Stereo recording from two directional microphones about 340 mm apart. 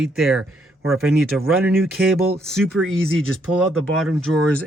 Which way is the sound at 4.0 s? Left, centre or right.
Centre.